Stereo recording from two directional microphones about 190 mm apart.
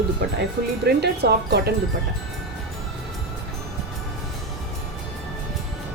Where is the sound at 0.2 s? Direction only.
55° right (ahead or behind).